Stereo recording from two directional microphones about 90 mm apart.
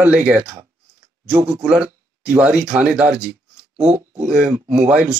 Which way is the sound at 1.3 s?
25° right (ahead or behind).